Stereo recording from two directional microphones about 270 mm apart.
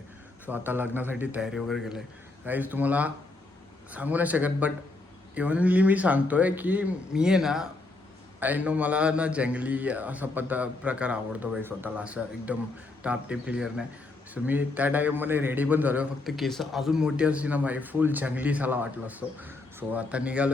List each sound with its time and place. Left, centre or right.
0.5 s a man's voice: centre